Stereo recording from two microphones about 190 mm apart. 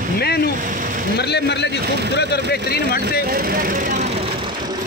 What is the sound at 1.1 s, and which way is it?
Speech, 60° left (ahead or behind).